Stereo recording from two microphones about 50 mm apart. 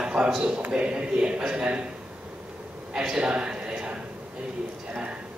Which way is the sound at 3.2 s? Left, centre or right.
Right.